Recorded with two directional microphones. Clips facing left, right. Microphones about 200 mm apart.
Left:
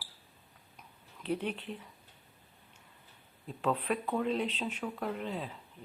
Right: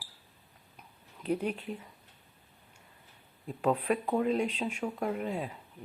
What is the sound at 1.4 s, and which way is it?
Speech, 10° right (ahead or behind).